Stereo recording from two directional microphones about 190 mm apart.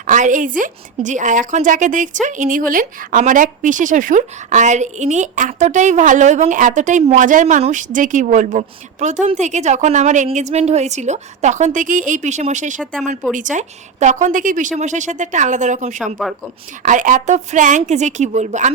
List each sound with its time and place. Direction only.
0.1 s a woman's voice: 40° right (ahead or behind)
12.8 s speech: 5° left (ahead or behind)
13.3 s a woman's voice: 40° right (ahead or behind)
16.2 s speech: centre (ahead or behind)
16.8 s a woman's voice: 40° right (ahead or behind)